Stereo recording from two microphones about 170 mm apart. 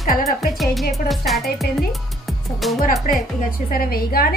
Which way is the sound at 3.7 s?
60° left (ahead or behind).